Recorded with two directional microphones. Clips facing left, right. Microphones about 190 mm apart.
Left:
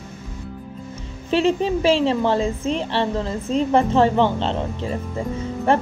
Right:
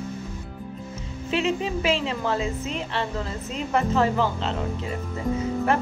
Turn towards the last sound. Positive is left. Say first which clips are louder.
# left 3 dB
turn(degrees=30)  # may be behind; listen again after turning